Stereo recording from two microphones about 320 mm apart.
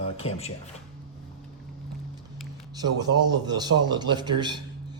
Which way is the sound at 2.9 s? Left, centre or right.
Right.